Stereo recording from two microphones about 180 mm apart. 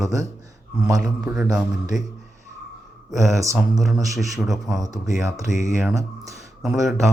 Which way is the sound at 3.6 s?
Centre (ahead or behind).